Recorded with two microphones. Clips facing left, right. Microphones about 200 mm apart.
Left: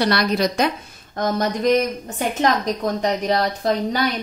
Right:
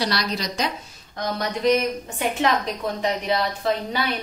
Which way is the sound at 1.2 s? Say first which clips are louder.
Left 3 dB; 45° left (ahead or behind).